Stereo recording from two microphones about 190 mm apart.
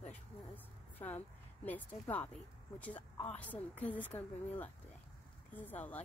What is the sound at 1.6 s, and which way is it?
A woman's voice, 10° left (ahead or behind).